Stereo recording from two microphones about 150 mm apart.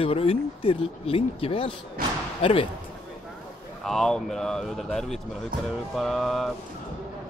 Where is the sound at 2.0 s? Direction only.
75° right (ahead or behind).